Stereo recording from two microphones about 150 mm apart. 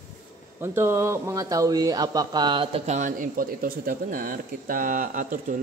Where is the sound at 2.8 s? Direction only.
55° right (ahead or behind).